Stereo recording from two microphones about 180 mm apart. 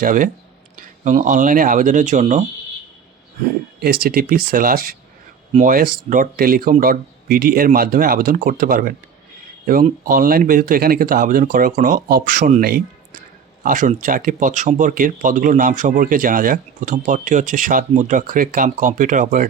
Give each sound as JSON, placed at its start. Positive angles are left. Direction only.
{"t": 0.0, "sound": "speech", "side_deg": -50}
{"t": 3.8, "sound": "speech", "side_deg": -60}
{"t": 10.0, "sound": "speech", "side_deg": -55}